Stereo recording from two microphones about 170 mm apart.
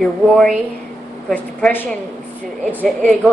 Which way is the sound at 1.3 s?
10° left (ahead or behind).